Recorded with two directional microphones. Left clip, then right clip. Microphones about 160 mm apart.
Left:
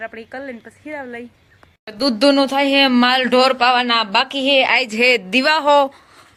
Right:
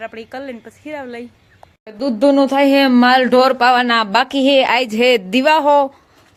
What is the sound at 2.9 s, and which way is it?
A man's voice, 25° right (ahead or behind).